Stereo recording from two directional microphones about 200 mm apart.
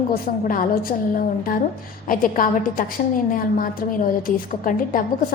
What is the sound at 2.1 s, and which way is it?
Speech, 45° left (ahead or behind).